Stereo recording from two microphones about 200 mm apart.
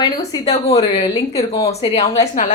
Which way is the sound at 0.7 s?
25° left (ahead or behind).